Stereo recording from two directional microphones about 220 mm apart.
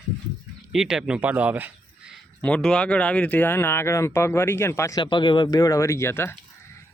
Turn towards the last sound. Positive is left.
turn(degrees=10)  # may be behind; listen again after turning